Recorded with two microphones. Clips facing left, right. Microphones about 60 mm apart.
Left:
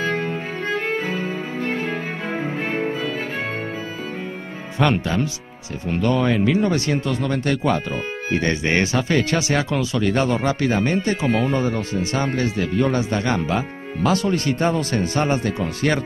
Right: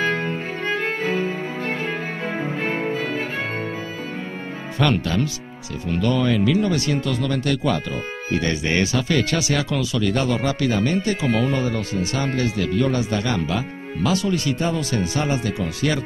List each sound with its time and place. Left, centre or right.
0.0 s music: right
2.3 s cello: right
3.0 s music: right
4.7 s speech: left